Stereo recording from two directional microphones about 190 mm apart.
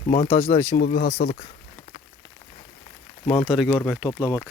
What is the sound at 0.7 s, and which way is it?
Speech, 60° left (ahead or behind).